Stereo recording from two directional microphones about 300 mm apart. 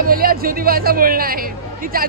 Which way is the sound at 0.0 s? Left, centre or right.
Right.